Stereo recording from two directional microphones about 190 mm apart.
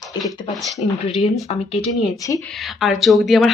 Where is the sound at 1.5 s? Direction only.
30° left (ahead or behind).